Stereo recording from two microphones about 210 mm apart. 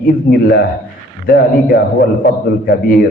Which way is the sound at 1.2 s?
45° left (ahead or behind).